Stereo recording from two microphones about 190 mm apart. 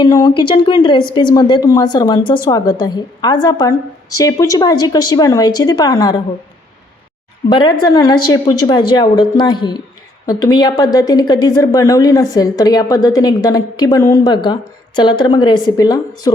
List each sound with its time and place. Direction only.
0.0 s a woman's voice: 20° left (ahead or behind)
7.5 s a woman's voice: 25° left (ahead or behind)